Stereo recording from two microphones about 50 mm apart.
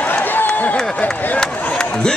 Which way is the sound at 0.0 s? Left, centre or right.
Left.